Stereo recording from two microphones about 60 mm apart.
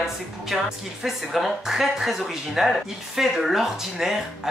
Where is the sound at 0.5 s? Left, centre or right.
Centre.